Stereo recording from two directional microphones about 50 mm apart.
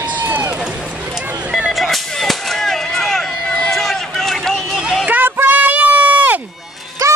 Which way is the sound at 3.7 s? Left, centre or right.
Centre.